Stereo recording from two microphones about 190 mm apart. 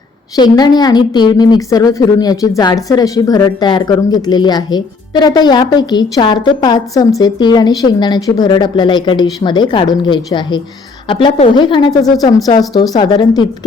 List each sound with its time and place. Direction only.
0.3 s a woman's voice: 20° left (ahead or behind)